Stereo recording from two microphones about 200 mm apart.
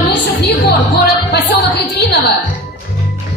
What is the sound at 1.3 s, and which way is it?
Music, 55° left (ahead or behind).